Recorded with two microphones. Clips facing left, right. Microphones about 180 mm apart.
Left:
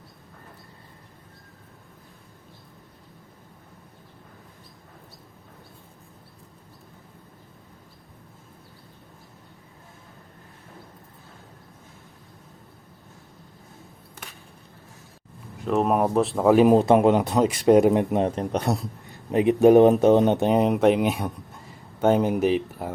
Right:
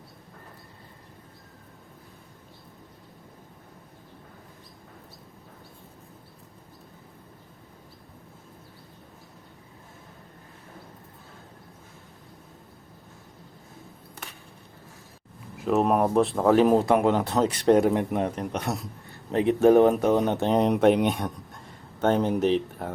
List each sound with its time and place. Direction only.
15.5 s speech: centre (ahead or behind)
16.7 s speech: 20° left (ahead or behind)
19.1 s speech: 15° left (ahead or behind)